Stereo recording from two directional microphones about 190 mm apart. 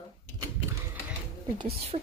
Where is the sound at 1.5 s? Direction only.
30° right (ahead or behind).